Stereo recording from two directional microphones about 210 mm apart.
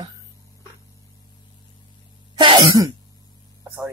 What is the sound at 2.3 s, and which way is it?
Cough, 25° right (ahead or behind).